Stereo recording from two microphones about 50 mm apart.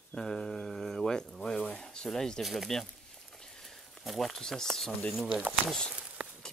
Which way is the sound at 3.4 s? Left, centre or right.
Centre.